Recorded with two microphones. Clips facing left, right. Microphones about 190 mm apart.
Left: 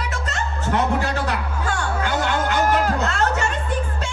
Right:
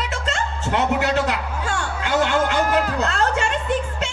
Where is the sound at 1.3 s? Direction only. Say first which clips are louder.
Even; 25° right (ahead or behind).